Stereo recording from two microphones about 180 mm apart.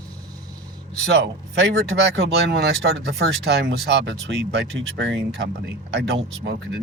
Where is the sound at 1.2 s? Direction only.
65° right (ahead or behind); by 5.2 s 90° right.